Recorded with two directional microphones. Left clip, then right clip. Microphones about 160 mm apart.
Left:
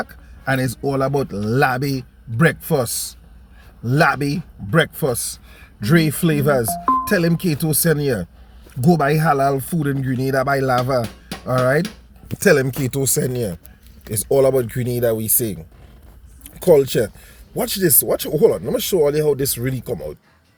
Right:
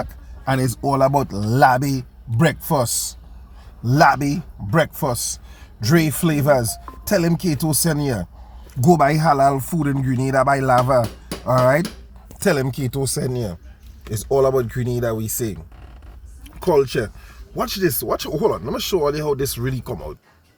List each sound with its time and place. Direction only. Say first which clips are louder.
0.4 s speech: even; centre (ahead or behind)
12.4 s speech: left 5 dB; 20° left (ahead or behind)
12.6 s speech: left 2 dB; 10° left (ahead or behind)